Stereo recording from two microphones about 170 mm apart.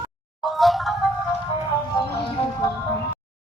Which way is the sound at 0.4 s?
Centre (ahead or behind).